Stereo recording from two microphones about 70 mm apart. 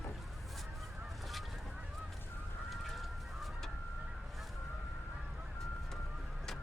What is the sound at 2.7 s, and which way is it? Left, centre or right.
Goose, centre.